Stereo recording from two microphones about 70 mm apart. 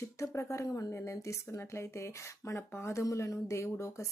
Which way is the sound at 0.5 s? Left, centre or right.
Left.